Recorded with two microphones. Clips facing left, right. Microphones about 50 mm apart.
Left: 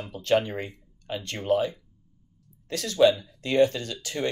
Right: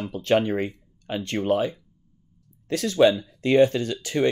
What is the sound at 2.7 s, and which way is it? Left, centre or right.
Speech, right.